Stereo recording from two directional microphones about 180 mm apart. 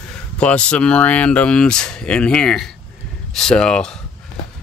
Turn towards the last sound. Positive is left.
turn(degrees=5)  # may be behind; listen again after turning